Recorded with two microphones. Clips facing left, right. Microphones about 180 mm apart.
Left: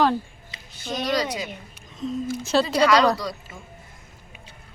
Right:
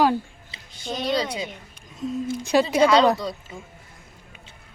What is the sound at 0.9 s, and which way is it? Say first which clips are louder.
Speech: even; 25° right (ahead or behind).